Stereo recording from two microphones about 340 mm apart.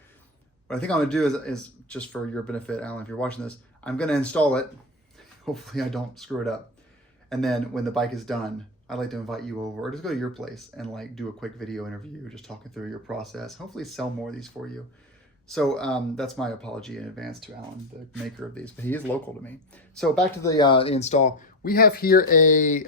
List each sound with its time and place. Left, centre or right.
0.7 s speech: centre
15.5 s speech: centre
18.5 s speech: centre; by 22.9 s left